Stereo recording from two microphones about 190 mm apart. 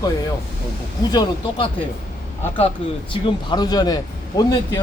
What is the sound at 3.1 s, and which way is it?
Speech, 25° left (ahead or behind).